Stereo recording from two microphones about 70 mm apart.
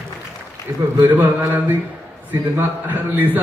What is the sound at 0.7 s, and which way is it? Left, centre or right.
Speech, right.